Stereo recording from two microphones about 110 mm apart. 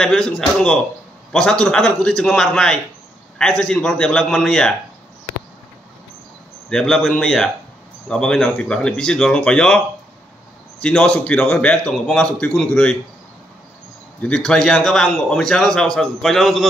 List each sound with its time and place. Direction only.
0.0 s speech: 5° left (ahead or behind)
6.7 s speech: 5° left (ahead or behind)
10.8 s speech: 10° left (ahead or behind)
14.2 s speech: 5° left (ahead or behind)